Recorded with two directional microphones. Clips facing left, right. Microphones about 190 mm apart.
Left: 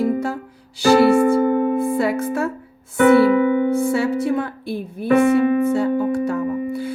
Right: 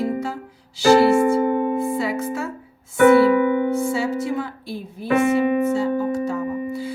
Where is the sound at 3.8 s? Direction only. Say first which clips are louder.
Left 3 dB; 60° left (ahead or behind).